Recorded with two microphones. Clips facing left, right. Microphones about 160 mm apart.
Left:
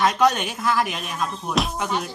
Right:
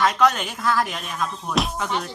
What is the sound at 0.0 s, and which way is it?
Speech, 20° left (ahead or behind).